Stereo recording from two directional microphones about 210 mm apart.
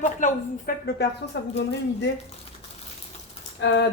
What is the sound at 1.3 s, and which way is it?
Speech, 55° left (ahead or behind).